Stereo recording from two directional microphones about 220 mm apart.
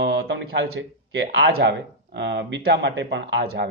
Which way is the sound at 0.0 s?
50° right (ahead or behind).